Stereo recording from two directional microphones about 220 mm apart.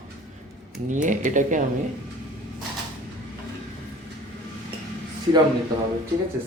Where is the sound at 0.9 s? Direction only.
35° right (ahead or behind).